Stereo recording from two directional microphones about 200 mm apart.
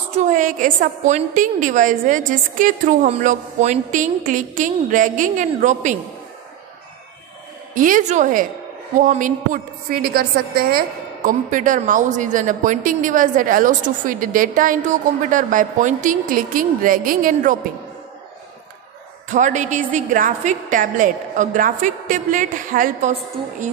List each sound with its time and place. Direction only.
0.1 s a woman's voice: 40° right (ahead or behind)
7.7 s a woman's voice: 40° right (ahead or behind)
19.2 s a woman's voice: 40° right (ahead or behind)